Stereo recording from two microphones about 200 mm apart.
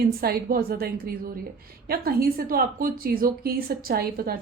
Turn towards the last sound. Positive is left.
turn(degrees=-45)  # may be behind; listen again after turning